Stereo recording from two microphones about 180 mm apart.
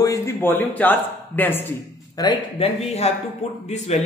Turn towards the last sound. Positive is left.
turn(degrees=40)  # may be behind; listen again after turning